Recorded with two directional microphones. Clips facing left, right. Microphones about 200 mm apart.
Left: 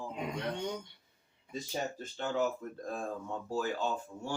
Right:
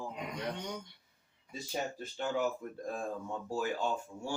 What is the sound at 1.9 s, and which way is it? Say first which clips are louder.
Speech: even; 10° right (ahead or behind).